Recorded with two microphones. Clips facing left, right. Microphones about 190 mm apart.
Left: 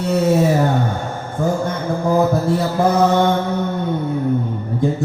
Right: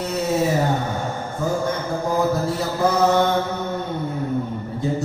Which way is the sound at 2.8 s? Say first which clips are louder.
Left 3 dB; 55° left (ahead or behind).